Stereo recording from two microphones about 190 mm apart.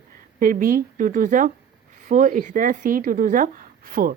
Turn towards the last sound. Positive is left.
turn(degrees=-50)  # may be behind; listen again after turning